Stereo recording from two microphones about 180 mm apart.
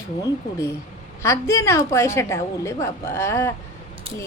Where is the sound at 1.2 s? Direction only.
15° left (ahead or behind).